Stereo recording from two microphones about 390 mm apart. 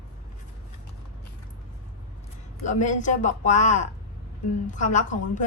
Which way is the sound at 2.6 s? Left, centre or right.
Centre.